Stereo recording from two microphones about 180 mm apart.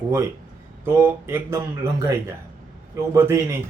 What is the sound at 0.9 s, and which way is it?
A man's voice, 10° right (ahead or behind).